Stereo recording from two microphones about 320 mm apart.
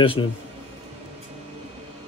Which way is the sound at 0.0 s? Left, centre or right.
Centre.